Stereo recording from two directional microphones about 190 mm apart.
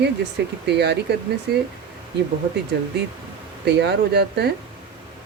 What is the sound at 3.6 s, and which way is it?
Speech, 65° right (ahead or behind).